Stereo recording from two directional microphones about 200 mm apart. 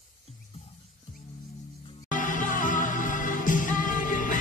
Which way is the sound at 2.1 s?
40° left (ahead or behind).